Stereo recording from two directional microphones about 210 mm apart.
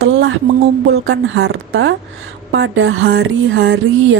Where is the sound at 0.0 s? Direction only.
60° right (ahead or behind).